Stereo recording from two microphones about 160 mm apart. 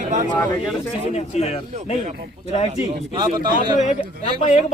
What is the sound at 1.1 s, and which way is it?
Speech, 40° left (ahead or behind).